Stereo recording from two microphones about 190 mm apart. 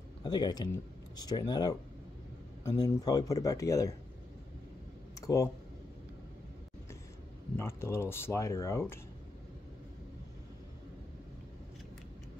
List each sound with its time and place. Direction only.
0.2 s speech: 20° left (ahead or behind)
5.2 s speech: 15° left (ahead or behind)
7.5 s speech: 15° left (ahead or behind)